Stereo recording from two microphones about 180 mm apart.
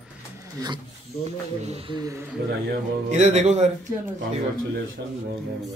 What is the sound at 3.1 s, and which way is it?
Speech, 40° right (ahead or behind).